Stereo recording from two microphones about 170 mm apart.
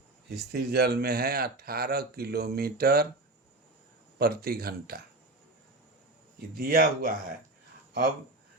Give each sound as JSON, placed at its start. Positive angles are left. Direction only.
{"t": 0.3, "sound": "speech", "side_deg": -70}
{"t": 4.2, "sound": "speech", "side_deg": -65}
{"t": 6.5, "sound": "speech", "side_deg": -60}